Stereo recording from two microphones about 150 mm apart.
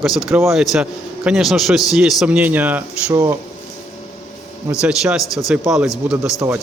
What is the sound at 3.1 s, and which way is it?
Speech, 25° right (ahead or behind).